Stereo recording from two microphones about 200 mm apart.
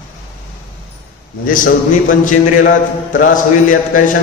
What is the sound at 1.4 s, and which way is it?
A man's voice, 45° left (ahead or behind).